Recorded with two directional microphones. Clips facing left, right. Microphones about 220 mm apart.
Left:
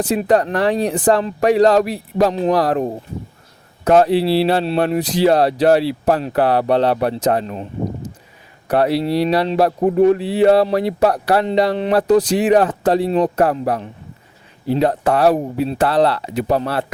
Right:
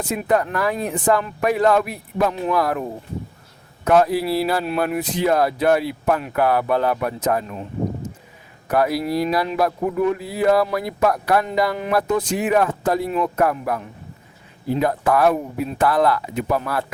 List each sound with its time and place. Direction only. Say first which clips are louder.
0.2 s a man's voice: left 2 dB; 30° left (ahead or behind)